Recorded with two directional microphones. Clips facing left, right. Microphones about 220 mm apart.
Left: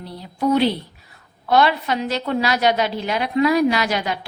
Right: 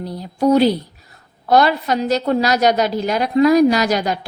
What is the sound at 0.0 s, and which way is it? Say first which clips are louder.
A woman's voice: right 5 dB; 40° right (ahead or behind).